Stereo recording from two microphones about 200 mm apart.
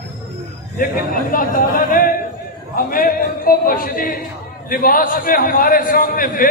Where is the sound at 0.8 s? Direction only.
45° left (ahead or behind).